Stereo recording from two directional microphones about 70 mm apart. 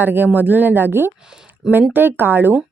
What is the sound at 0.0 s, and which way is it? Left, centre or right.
A woman's voice, right.